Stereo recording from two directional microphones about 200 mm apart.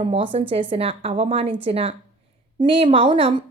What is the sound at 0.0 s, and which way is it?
A woman's voice, 25° right (ahead or behind).